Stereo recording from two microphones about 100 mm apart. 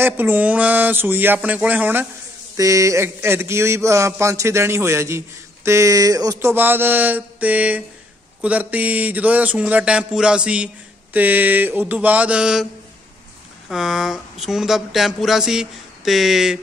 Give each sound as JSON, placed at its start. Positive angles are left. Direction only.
{"t": 0.0, "sound": "speech", "side_deg": -20}
{"t": 2.5, "sound": "speech", "side_deg": -35}
{"t": 6.5, "sound": "a man's voice", "side_deg": -20}
{"t": 13.7, "sound": "speech", "side_deg": -5}